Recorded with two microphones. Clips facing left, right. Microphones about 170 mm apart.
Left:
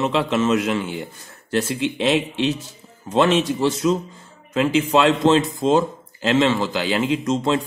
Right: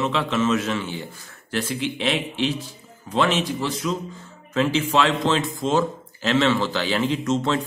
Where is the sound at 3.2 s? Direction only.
25° left (ahead or behind).